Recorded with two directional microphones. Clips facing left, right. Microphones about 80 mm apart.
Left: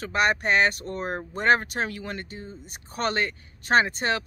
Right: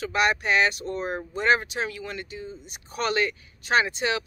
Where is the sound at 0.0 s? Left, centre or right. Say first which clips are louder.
Even; left.